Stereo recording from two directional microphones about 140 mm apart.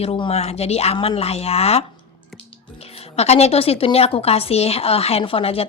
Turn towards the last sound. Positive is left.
turn(degrees=45)  # may be behind; listen again after turning